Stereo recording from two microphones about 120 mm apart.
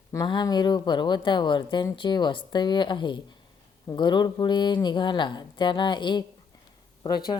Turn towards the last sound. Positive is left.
turn(degrees=35)  # may be behind; listen again after turning